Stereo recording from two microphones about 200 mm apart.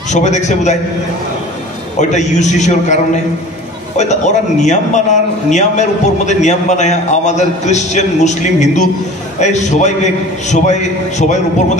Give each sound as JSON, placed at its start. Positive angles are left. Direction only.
{"t": 0.1, "sound": "a man's voice", "side_deg": 35}
{"t": 2.0, "sound": "a man's voice", "side_deg": 35}